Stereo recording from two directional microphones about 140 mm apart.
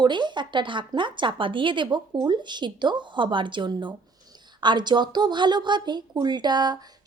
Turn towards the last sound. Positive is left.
turn(degrees=-30)  # may be behind; listen again after turning